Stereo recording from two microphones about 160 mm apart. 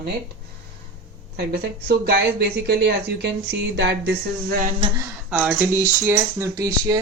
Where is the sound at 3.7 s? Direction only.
90° right; by 4.7 s 65° right (ahead or behind).